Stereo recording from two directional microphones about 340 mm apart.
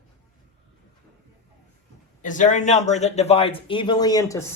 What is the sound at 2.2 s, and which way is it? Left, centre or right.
Speech, left.